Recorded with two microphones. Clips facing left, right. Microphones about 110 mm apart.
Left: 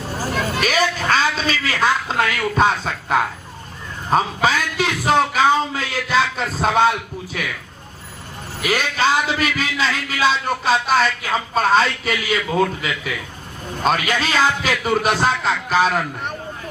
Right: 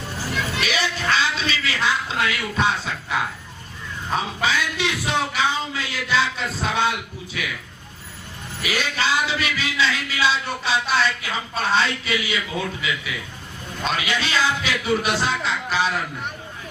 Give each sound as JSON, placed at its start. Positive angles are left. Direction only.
{"t": 0.2, "sound": "a sound", "side_deg": 45}
{"t": 4.1, "sound": "a man's voice", "side_deg": 45}
{"t": 8.6, "sound": "a man's voice", "side_deg": 45}